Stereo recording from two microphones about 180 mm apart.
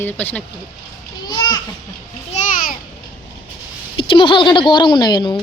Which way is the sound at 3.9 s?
30° left (ahead or behind).